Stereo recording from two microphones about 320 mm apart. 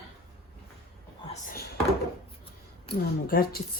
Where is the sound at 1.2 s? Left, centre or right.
Left.